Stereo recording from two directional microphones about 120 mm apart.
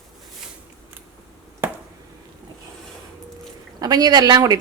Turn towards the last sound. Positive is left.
turn(degrees=-35)  # may be behind; listen again after turning